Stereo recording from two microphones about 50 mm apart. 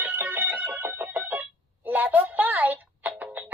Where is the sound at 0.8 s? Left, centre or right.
Right.